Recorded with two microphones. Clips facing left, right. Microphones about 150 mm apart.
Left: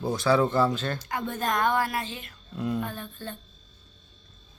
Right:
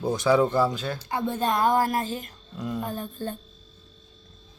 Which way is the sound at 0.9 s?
30° right (ahead or behind).